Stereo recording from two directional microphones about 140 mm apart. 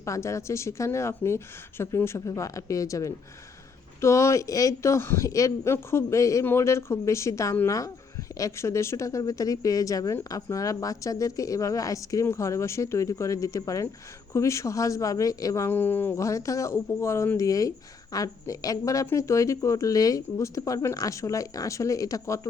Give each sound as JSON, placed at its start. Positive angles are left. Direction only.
{"t": 0.0, "sound": "a man's voice", "side_deg": 20}